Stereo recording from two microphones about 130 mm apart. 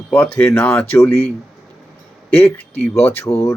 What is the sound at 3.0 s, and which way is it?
Mantra, 20° left (ahead or behind).